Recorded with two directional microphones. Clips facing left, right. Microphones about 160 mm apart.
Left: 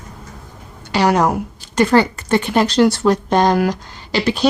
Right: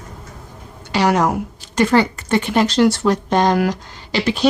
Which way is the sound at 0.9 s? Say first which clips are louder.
Left 1 dB; 35° left (ahead or behind).